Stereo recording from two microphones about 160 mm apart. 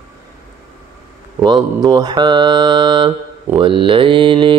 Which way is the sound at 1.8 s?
25° right (ahead or behind).